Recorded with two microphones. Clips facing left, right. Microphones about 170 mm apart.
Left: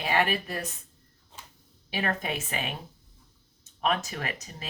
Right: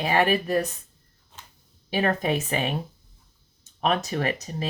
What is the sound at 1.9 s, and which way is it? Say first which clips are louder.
Speech: right 7 dB; 35° right (ahead or behind).